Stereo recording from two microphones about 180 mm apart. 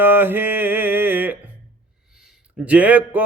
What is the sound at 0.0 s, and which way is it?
Mantra, 10° right (ahead or behind).